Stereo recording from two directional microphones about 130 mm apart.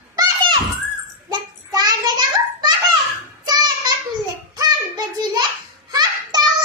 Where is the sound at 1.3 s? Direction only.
30° right (ahead or behind).